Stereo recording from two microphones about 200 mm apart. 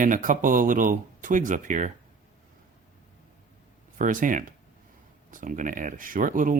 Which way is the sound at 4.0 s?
40° right (ahead or behind).